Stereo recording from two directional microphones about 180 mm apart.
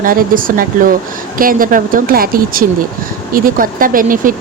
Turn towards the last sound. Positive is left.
turn(degrees=-50)  # may be behind; listen again after turning